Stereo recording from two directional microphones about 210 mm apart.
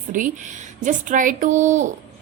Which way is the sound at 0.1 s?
35° right (ahead or behind).